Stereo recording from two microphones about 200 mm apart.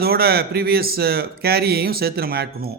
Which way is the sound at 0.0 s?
50° right (ahead or behind).